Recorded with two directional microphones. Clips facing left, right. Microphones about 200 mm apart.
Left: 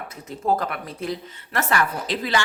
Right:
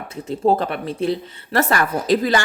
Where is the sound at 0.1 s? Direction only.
30° right (ahead or behind).